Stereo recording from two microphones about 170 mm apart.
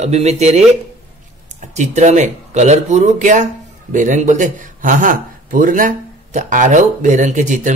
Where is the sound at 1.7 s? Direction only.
45° right (ahead or behind).